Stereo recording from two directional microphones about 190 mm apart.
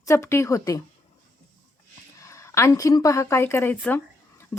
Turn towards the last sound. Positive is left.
turn(degrees=10)  # may be behind; listen again after turning